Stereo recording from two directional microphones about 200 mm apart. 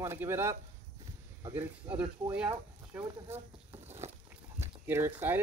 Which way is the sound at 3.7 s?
35° right (ahead or behind).